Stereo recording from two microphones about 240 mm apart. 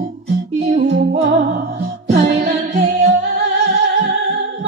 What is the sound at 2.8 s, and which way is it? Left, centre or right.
Music, right.